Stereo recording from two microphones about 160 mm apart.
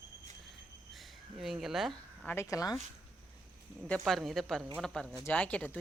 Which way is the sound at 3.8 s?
5° left (ahead or behind).